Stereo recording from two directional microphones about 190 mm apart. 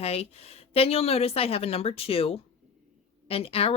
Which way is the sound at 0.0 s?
30° left (ahead or behind).